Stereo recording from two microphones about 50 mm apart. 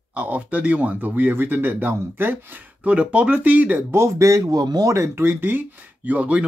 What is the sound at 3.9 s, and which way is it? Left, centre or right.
Speech, right.